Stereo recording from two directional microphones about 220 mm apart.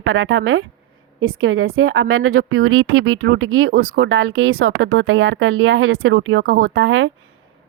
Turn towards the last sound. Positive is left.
turn(degrees=-60)  # may be behind; listen again after turning